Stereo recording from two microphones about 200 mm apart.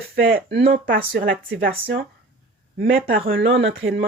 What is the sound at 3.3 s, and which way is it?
Speech, 70° right (ahead or behind).